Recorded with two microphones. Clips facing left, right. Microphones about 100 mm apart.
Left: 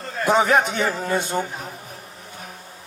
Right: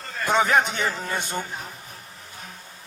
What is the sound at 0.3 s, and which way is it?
Speech, 35° left (ahead or behind).